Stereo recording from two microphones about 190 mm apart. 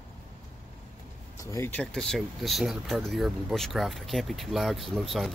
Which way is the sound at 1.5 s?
10° left (ahead or behind).